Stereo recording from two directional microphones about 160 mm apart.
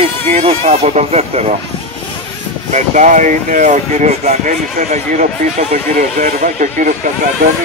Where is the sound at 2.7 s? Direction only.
50° right (ahead or behind).